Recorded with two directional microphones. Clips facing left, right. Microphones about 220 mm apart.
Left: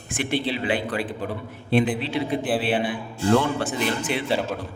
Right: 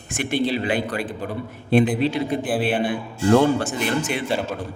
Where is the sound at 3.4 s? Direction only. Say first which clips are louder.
Right 6 dB; 45° right (ahead or behind).